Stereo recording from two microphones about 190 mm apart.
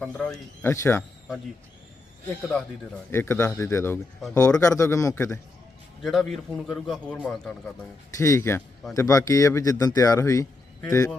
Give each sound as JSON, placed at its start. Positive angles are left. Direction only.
{"t": 0.0, "sound": "speech", "side_deg": 5}
{"t": 3.1, "sound": "speech", "side_deg": 10}
{"t": 6.0, "sound": "a man's voice", "side_deg": 0}
{"t": 8.2, "sound": "speech", "side_deg": 15}